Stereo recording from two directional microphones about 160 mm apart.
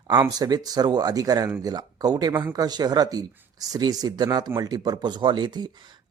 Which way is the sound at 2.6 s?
25° right (ahead or behind).